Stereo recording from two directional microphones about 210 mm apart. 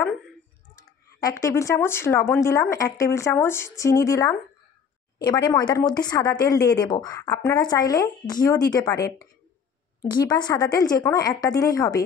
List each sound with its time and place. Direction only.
0.7 s a woman's voice: 15° left (ahead or behind)